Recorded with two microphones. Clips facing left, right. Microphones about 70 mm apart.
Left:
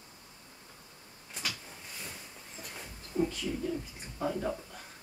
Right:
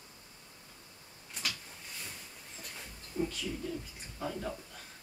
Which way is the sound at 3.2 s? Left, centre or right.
Left.